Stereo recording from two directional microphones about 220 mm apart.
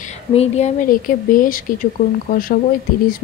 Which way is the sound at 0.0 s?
30° left (ahead or behind).